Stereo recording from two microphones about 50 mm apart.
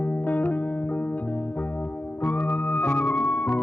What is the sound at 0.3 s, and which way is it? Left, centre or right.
Music, left.